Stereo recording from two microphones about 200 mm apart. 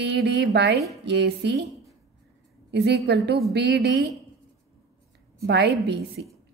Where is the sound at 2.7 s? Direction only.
55° right (ahead or behind).